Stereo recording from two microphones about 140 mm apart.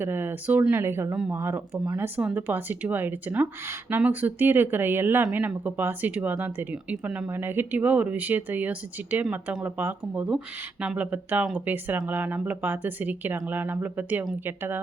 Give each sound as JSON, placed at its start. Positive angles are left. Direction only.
{"t": 0.0, "sound": "speech", "side_deg": -15}